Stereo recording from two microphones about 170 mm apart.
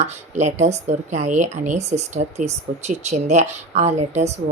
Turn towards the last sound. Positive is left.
turn(degrees=-40)  # may be behind; listen again after turning